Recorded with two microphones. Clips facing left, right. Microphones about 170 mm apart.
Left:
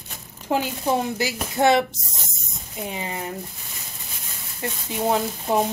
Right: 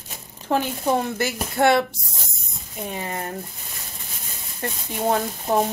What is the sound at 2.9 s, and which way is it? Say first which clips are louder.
Speech: right 1 dB; 15° left (ahead or behind).